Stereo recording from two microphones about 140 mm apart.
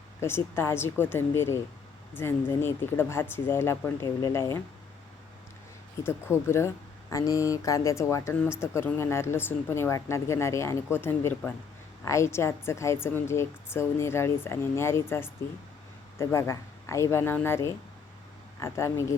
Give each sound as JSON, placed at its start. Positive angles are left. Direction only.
{"t": 0.2, "sound": "speech", "side_deg": 15}
{"t": 6.0, "sound": "a woman's voice", "side_deg": 15}